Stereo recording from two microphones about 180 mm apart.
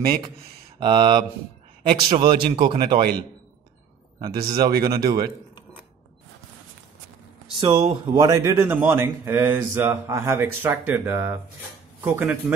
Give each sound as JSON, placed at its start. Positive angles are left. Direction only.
{"t": 0.7, "sound": "speech", "side_deg": -25}
{"t": 4.5, "sound": "speech", "side_deg": -20}
{"t": 7.6, "sound": "speech", "side_deg": -30}